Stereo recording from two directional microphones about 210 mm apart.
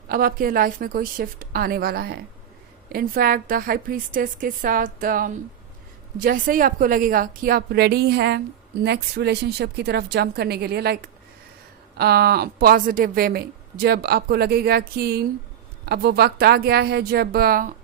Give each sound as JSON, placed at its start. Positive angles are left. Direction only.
{"t": 0.1, "sound": "a woman's voice", "side_deg": -45}
{"t": 11.9, "sound": "speech", "side_deg": -50}